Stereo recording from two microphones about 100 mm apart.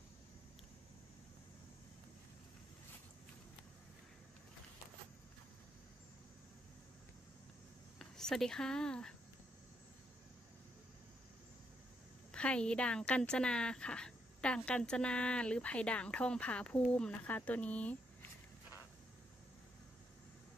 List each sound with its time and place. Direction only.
8.0 s speech: 5° left (ahead or behind)
12.3 s a woman's voice: 10° left (ahead or behind)